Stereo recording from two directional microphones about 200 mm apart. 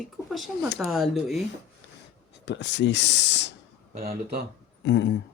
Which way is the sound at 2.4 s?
60° left (ahead or behind).